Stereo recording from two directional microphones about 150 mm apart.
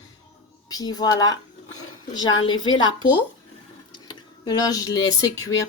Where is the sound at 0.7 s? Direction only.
25° left (ahead or behind).